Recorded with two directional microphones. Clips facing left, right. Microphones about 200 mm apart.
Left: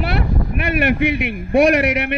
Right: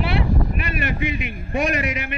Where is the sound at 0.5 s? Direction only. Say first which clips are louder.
Left 8 dB; 65° left (ahead or behind).